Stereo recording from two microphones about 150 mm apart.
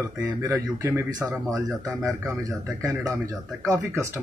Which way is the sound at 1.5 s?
20° right (ahead or behind).